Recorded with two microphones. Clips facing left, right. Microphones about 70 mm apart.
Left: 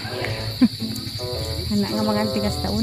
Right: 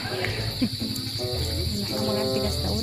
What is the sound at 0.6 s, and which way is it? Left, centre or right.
Cricket, left.